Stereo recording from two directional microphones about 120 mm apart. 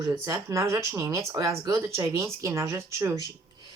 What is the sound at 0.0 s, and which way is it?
Speech, 35° right (ahead or behind).